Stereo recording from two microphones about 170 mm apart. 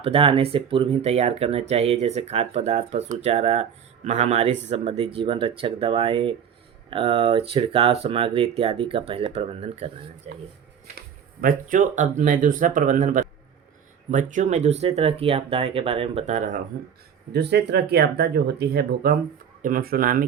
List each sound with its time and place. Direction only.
0.0 s speech: 35° right (ahead or behind)
10.9 s speech: 55° right (ahead or behind)
17.3 s speech: 75° right (ahead or behind); by 20.2 s 55° right (ahead or behind)